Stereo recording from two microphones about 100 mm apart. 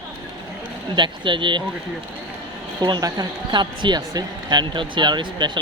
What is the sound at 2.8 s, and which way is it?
A woman's voice, 45° right (ahead or behind).